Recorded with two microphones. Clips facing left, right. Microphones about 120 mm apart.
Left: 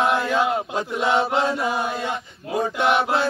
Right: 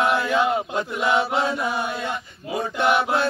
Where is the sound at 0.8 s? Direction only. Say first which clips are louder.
Left 1 dB; 25° left (ahead or behind).